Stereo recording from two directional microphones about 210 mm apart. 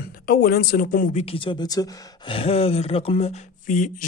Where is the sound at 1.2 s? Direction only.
25° left (ahead or behind).